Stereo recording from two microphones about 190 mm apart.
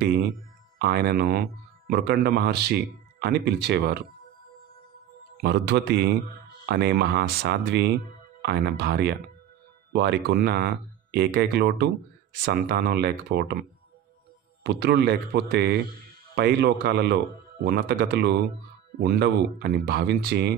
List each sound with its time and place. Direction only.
0.7 s speech: 55° right (ahead or behind)
5.4 s speech: 60° right (ahead or behind)